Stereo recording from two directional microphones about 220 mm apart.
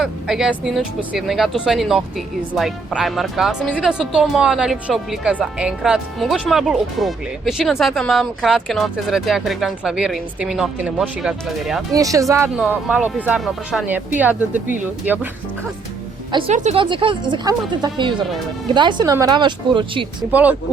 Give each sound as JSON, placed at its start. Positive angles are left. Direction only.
{"t": 0.0, "sound": "speech", "side_deg": 0}
{"t": 11.9, "sound": "speech", "side_deg": -15}
{"t": 16.3, "sound": "speech", "side_deg": -25}
{"t": 20.3, "sound": "speech", "side_deg": -5}